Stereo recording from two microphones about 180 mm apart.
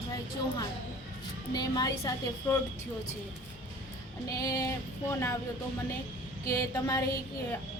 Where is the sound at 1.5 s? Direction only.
20° left (ahead or behind).